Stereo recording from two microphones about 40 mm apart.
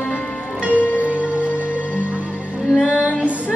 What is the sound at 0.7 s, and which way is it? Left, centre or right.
Music, left.